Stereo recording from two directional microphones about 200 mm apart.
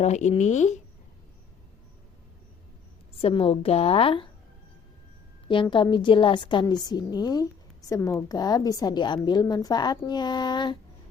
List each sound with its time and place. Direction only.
0.0 s speech: 35° left (ahead or behind)
3.2 s a woman's voice: 30° left (ahead or behind)
5.6 s a woman's voice: 20° left (ahead or behind)